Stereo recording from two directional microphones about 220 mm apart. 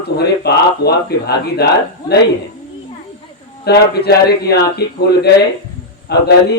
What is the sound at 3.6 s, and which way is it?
A man's voice, 45° left (ahead or behind).